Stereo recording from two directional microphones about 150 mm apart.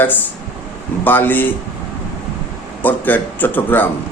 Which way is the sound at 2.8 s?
10° left (ahead or behind).